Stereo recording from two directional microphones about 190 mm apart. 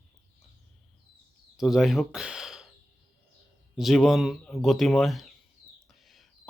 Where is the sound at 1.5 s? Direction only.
Centre (ahead or behind).